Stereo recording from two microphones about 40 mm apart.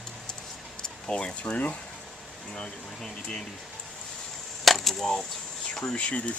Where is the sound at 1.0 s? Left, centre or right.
Left.